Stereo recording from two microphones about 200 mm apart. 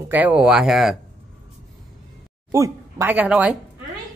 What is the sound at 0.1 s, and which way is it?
Speech, 5° right (ahead or behind).